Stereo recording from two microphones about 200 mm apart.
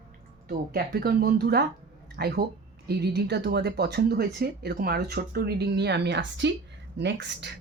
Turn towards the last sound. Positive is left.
turn(degrees=-60)  # may be behind; listen again after turning